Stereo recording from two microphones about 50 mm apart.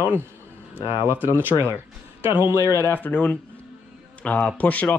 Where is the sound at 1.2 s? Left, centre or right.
Right.